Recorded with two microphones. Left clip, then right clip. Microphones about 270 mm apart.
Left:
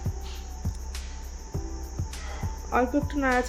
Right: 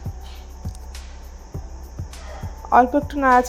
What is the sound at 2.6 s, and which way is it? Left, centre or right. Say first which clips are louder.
Speech: right 10 dB; centre.